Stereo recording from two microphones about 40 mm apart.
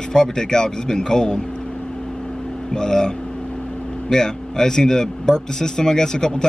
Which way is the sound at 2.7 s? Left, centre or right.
Centre.